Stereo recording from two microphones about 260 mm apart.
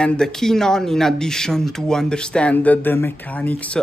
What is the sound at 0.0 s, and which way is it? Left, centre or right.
Speech, centre.